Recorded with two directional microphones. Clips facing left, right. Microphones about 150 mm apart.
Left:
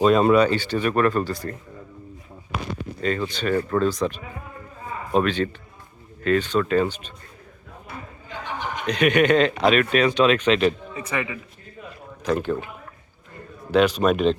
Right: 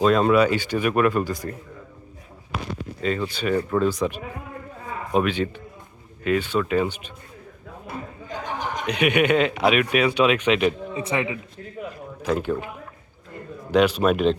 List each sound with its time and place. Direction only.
0.0 s speech: 5° left (ahead or behind)
0.3 s speech: 10° right (ahead or behind)
3.0 s speech: 5° right (ahead or behind)
8.9 s speech: 10° right (ahead or behind)
10.9 s a man's voice: 25° right (ahead or behind)
12.2 s speech: 10° right (ahead or behind)
13.7 s speech: 10° right (ahead or behind)